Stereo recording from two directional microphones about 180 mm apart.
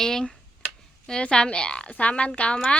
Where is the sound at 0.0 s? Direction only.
5° left (ahead or behind).